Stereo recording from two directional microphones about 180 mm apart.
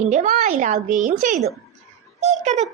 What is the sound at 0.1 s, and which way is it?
A woman's voice, 45° right (ahead or behind).